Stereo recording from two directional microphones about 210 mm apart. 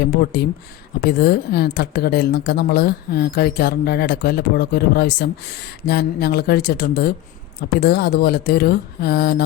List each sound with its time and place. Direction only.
0.0 s speech: 50° left (ahead or behind)